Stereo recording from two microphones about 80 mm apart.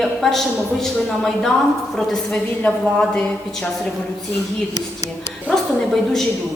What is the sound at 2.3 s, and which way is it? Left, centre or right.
A woman's voice, centre.